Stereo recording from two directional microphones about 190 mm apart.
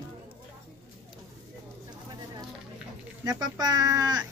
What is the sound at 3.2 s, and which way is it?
A woman's voice, 20° right (ahead or behind).